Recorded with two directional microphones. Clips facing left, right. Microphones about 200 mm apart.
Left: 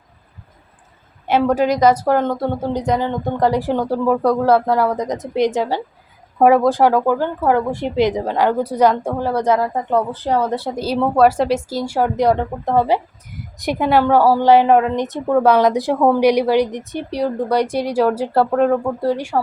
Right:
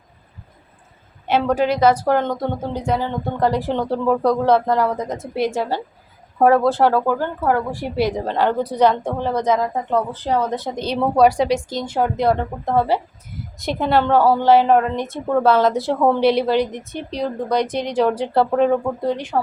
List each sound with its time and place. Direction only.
1.3 s speech: 10° left (ahead or behind)